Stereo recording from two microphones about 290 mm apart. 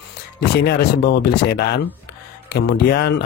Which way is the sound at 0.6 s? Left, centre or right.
Left.